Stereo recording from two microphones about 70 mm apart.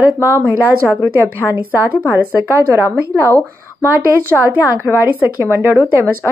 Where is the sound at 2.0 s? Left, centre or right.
Right.